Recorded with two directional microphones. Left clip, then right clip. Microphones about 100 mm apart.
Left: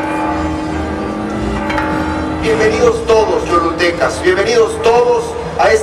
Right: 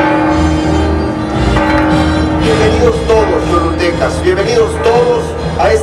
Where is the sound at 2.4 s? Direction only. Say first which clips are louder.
Even; centre (ahead or behind).